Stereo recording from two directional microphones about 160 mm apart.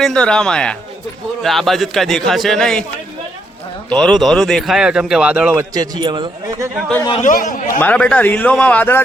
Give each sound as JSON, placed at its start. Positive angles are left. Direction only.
{"t": 0.0, "sound": "speech", "side_deg": 5}
{"t": 3.8, "sound": "speech", "side_deg": 5}
{"t": 5.7, "sound": "a man's voice", "side_deg": -25}
{"t": 7.2, "sound": "speech", "side_deg": 50}
{"t": 7.8, "sound": "a man's voice", "side_deg": 10}